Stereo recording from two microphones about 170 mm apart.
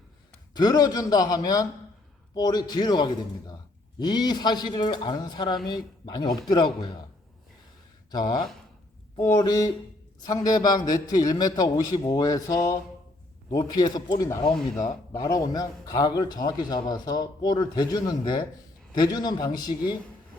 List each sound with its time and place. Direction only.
0.5 s a man's voice: 25° left (ahead or behind)
8.1 s a man's voice: 25° left (ahead or behind)